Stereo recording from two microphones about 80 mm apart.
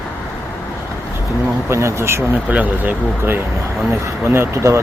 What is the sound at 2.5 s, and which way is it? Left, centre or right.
Speech, centre.